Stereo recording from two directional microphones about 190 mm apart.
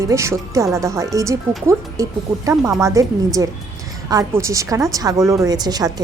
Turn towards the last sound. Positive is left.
turn(degrees=-20)  # may be behind; listen again after turning